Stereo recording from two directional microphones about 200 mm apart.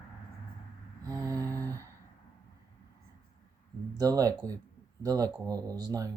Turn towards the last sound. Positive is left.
turn(degrees=-15)  # may be behind; listen again after turning